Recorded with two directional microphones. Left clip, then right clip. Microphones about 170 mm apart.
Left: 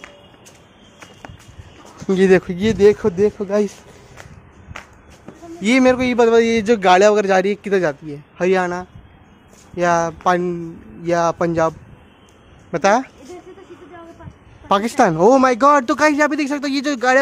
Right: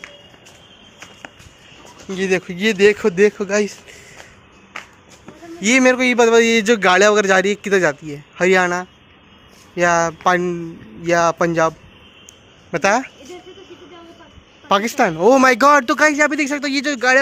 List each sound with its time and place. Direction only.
2.0 s speech: 55° left (ahead or behind)
2.4 s speech: 20° left (ahead or behind); by 3.3 s centre (ahead or behind)
3.4 s speech: 20° left (ahead or behind)
4.7 s music: 5° left (ahead or behind)
5.6 s speech: 5° left (ahead or behind)
12.7 s speech: 10° left (ahead or behind)
14.7 s speech: 20° left (ahead or behind)
15.4 s speech: centre (ahead or behind); by 17.2 s 15° left (ahead or behind)